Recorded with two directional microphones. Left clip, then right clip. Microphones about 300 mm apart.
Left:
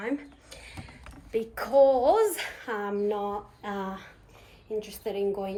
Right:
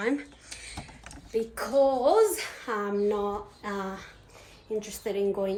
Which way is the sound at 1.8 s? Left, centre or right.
Centre.